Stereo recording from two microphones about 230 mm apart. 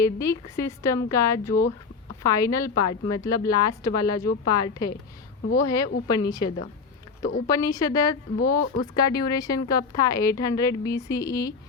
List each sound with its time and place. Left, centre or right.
0.0 s speech: centre